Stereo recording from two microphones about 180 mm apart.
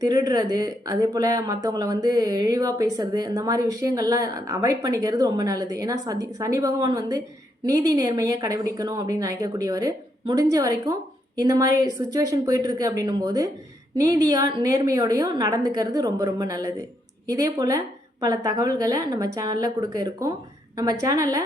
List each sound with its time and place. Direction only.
0.0 s speech: 20° right (ahead or behind)